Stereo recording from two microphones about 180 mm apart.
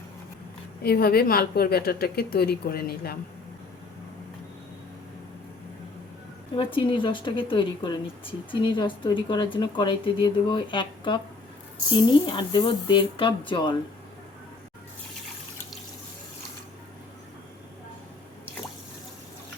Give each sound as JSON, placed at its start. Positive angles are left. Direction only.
{"t": 0.8, "sound": "a woman's voice", "side_deg": 55}
{"t": 6.6, "sound": "speech", "side_deg": 30}